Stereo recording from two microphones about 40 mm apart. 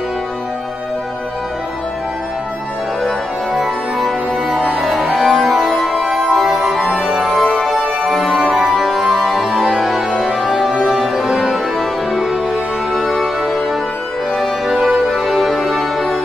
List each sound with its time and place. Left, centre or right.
3.5 s music: centre
4.8 s organ: centre
10.4 s music: centre
14.3 s music: centre